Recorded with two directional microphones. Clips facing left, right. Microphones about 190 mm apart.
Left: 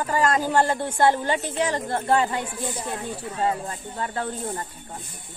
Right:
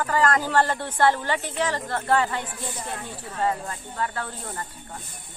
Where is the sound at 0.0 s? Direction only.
20° left (ahead or behind).